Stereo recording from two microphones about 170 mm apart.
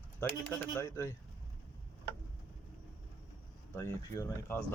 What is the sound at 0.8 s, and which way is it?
Speech, 15° left (ahead or behind).